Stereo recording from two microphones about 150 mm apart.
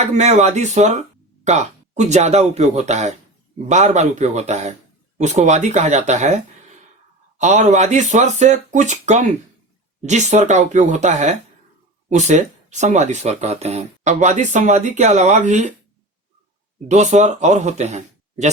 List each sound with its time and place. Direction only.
0.1 s speech: 50° right (ahead or behind)
16.9 s speech: 50° right (ahead or behind)